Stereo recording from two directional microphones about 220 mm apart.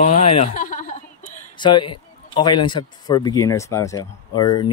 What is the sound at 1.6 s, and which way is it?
A man's voice, 20° left (ahead or behind).